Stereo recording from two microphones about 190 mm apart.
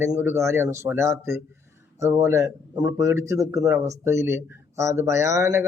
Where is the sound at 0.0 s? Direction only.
10° right (ahead or behind).